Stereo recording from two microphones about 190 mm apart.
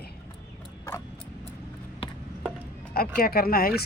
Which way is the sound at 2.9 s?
50° left (ahead or behind).